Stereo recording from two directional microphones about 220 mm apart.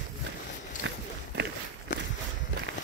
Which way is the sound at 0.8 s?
55° right (ahead or behind).